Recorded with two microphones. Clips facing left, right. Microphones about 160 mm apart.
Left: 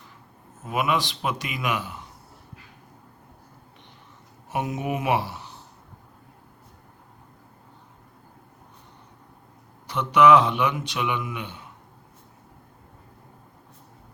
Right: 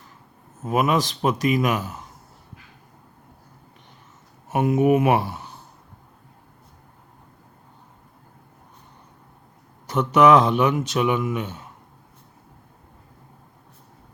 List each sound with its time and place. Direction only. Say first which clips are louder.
0.7 s speech: right 4 dB; 40° right (ahead or behind)
4.5 s speech: right 10 dB; 55° right (ahead or behind)
9.8 s speech: right 2 dB; 45° right (ahead or behind)